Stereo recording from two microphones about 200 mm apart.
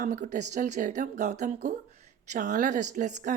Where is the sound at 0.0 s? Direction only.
40° right (ahead or behind).